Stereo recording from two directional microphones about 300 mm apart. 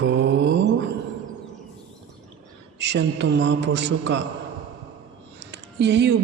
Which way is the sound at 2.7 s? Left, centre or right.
Right.